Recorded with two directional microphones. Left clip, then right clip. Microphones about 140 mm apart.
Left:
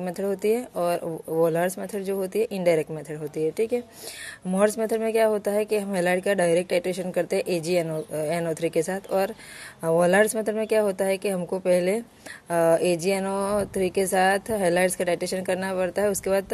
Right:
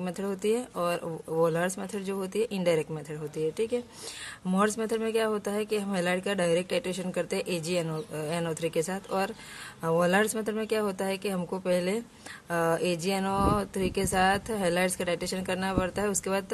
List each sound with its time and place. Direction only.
0.0 s speech: 20° left (ahead or behind)